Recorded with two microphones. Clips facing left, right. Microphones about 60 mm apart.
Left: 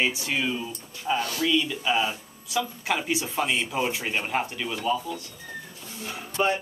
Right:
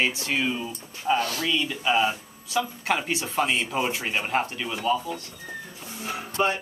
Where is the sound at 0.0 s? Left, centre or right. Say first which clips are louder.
Even; centre.